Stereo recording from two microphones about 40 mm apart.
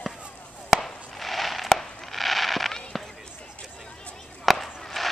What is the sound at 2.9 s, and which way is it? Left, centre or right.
Basketball bounce, centre.